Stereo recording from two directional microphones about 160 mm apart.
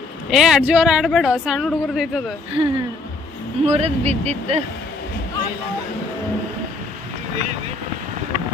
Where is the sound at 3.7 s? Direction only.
40° right (ahead or behind).